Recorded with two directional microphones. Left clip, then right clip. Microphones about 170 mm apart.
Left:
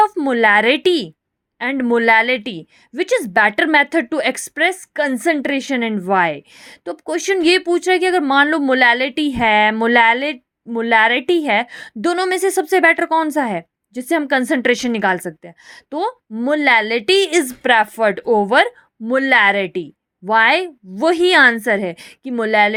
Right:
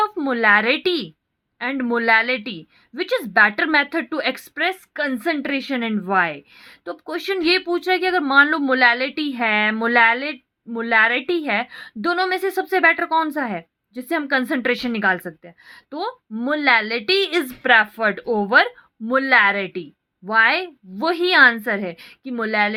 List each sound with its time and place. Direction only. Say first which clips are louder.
0.2 s a woman's voice: left 3 dB; 40° left (ahead or behind)